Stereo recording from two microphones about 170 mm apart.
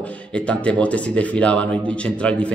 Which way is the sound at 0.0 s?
5° left (ahead or behind).